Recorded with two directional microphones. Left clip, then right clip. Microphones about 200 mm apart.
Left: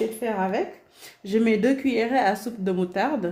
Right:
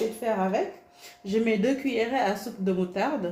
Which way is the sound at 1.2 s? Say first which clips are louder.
Left 3 dB; 55° left (ahead or behind).